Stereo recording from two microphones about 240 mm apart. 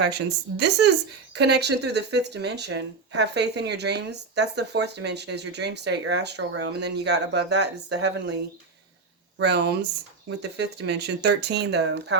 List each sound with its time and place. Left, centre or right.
0.0 s speech: right
9.4 s speech: right